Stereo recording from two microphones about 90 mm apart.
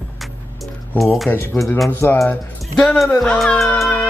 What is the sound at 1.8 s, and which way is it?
Speech, 25° left (ahead or behind).